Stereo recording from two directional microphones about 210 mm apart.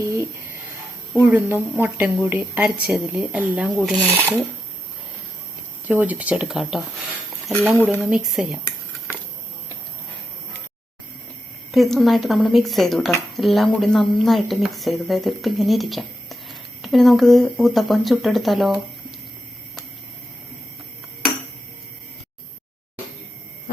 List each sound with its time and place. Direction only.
0.0 s a sound: 15° right (ahead or behind)
1.1 s speech: 5° right (ahead or behind)
5.9 s speech: 10° right (ahead or behind)
7.8 s speech: 10° left (ahead or behind)
8.0 s speech: 5° right (ahead or behind)
11.7 s speech: centre (ahead or behind)